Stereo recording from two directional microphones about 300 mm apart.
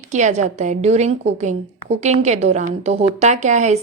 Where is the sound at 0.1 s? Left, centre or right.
Right.